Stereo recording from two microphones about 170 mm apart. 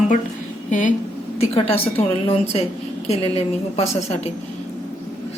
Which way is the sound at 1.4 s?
35° left (ahead or behind).